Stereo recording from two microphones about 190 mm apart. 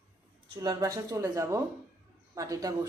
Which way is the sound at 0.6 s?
20° right (ahead or behind).